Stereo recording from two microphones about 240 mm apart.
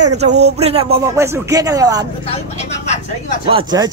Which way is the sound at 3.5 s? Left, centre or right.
Centre.